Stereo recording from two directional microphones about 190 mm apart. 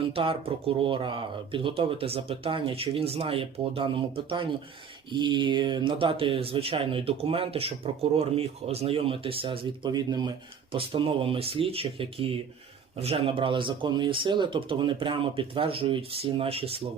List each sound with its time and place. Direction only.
0.0 s speech: 30° right (ahead or behind)